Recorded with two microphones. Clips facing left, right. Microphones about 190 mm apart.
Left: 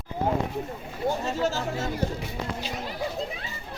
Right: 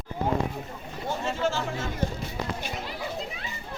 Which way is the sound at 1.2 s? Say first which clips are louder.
Left 1 dB; 40° left (ahead or behind).